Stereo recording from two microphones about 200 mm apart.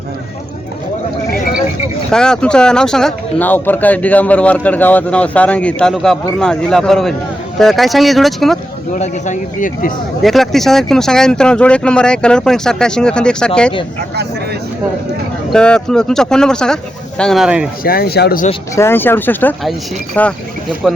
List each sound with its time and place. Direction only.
2.0 s speech: 5° left (ahead or behind)
9.0 s speech: 35° left (ahead or behind)
10.2 s speech: centre (ahead or behind)
15.5 s speech: 5° left (ahead or behind)
17.8 s speech: 50° left (ahead or behind)
18.8 s speech: 10° left (ahead or behind)